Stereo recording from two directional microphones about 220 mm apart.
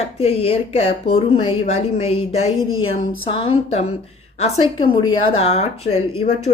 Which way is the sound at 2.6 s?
70° left (ahead or behind).